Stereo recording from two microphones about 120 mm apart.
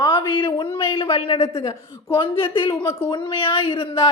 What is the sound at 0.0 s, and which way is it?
Speech, 45° left (ahead or behind).